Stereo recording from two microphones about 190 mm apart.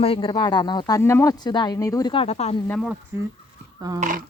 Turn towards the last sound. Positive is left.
turn(degrees=-20)  # may be behind; listen again after turning